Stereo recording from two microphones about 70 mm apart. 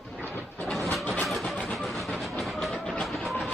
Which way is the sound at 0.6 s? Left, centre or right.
Centre.